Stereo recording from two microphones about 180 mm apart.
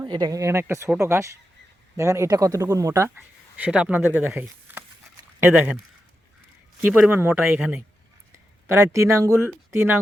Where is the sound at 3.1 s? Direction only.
5° right (ahead or behind).